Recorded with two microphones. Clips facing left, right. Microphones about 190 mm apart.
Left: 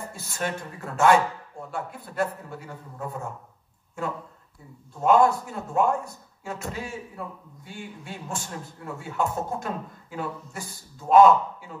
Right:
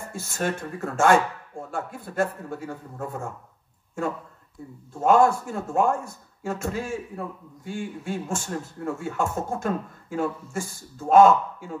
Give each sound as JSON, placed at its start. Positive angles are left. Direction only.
{"t": 0.1, "sound": "speech", "side_deg": -50}
{"t": 5.0, "sound": "speech", "side_deg": -50}